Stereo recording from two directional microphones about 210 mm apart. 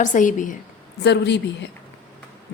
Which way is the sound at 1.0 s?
55° left (ahead or behind).